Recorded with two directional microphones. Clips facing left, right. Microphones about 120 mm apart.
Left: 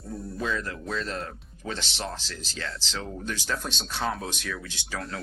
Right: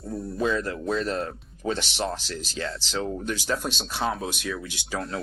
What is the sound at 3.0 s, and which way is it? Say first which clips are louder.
Speech: right 6 dB; 15° right (ahead or behind).